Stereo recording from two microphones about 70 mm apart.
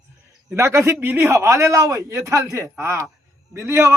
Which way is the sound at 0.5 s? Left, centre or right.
Right.